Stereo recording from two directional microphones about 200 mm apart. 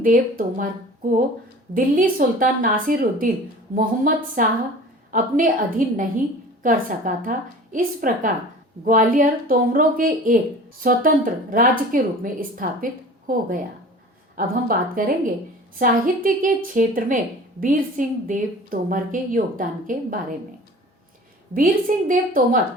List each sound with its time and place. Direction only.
0.0 s a woman's voice: 40° right (ahead or behind)
1.7 s a woman's voice: 45° right (ahead or behind)
21.5 s a woman's voice: 45° right (ahead or behind)